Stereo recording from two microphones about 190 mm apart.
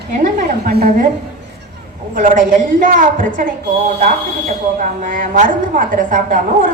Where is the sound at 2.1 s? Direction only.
45° right (ahead or behind).